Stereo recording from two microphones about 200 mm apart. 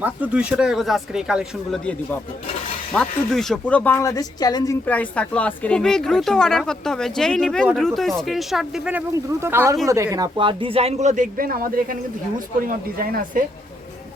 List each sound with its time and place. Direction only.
0.0 s speech: 5° right (ahead or behind); by 13.4 s 45° right (ahead or behind)